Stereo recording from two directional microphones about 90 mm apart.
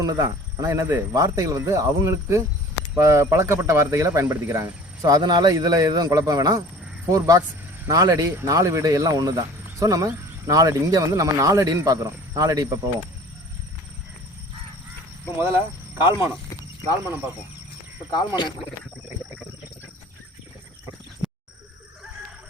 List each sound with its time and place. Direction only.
0.0 s speech: 40° right (ahead or behind)
5.0 s a man's voice: 50° right (ahead or behind)
15.4 s speech: 25° right (ahead or behind)
18.1 s speech: 55° left (ahead or behind)